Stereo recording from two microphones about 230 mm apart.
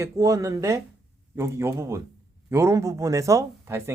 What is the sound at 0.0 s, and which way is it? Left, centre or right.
Speech, centre.